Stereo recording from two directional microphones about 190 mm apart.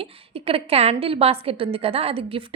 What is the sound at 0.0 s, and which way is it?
A woman's voice, 30° right (ahead or behind).